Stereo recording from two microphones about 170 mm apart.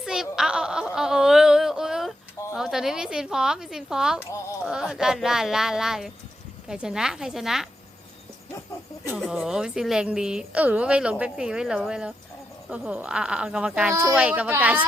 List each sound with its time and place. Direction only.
0.0 s a sound: 5° right (ahead or behind)
2.6 s speech: centre (ahead or behind)
9.0 s speech: 5° right (ahead or behind)
13.9 s speech: 20° right (ahead or behind)
14.2 s speech: 10° right (ahead or behind)